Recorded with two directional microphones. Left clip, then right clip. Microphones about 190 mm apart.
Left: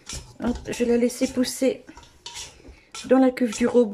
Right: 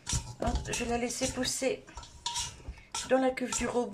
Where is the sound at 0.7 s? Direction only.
40° left (ahead or behind).